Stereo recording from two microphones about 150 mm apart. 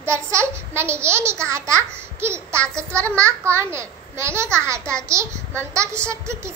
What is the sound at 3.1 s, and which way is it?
A child's voice, 20° right (ahead or behind).